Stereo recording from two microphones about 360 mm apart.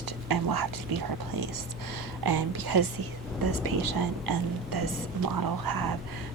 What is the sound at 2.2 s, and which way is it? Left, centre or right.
Speech, right.